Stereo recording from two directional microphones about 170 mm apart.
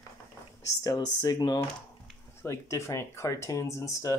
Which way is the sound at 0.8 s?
20° left (ahead or behind).